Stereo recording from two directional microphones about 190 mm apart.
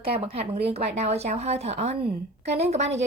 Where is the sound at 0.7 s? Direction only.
35° right (ahead or behind).